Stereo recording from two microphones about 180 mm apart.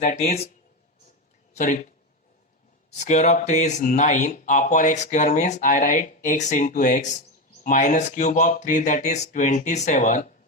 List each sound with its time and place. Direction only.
0.0 s speech: 40° left (ahead or behind)
1.5 s speech: 45° left (ahead or behind)
3.0 s speech: 40° left (ahead or behind)